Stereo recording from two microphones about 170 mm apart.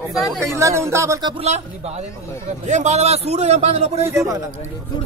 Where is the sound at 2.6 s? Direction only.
45° right (ahead or behind).